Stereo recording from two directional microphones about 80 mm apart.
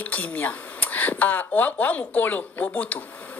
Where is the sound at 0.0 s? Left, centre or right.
Centre.